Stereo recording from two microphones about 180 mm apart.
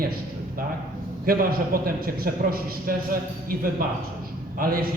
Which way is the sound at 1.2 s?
55° right (ahead or behind).